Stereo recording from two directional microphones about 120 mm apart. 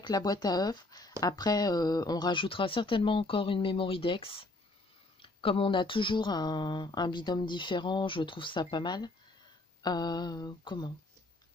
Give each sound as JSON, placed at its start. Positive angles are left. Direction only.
{"t": 0.0, "sound": "speech", "side_deg": 30}